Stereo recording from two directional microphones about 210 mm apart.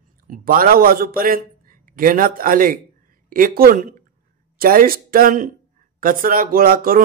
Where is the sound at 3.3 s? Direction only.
45° right (ahead or behind).